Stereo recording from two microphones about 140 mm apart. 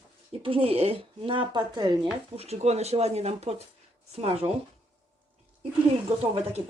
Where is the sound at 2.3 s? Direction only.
50° right (ahead or behind).